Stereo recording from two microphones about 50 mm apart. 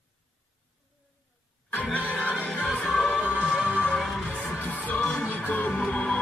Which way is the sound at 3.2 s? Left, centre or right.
Right.